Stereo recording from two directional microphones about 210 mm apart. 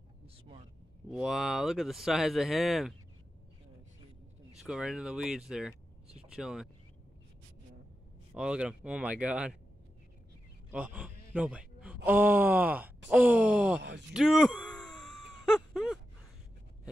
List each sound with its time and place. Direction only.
1.1 s speech: centre (ahead or behind)
4.6 s speech: 5° right (ahead or behind)
8.4 s speech: 5° right (ahead or behind)
10.7 s speech: 5° right (ahead or behind)
13.7 s speech: 55° right (ahead or behind)
14.1 s a sound: centre (ahead or behind)